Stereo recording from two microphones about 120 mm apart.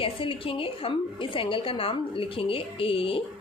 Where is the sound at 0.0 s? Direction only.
50° left (ahead or behind).